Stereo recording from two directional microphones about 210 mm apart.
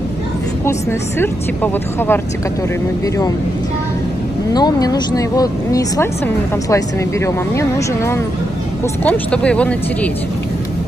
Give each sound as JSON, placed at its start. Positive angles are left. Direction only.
{"t": 1.2, "sound": "speech", "side_deg": 10}
{"t": 4.6, "sound": "speech", "side_deg": 20}